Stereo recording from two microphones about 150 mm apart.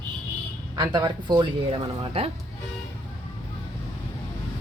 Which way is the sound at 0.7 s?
25° right (ahead or behind).